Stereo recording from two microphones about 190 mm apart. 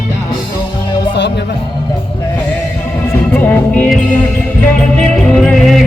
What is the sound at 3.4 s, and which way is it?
Speech, 10° left (ahead or behind).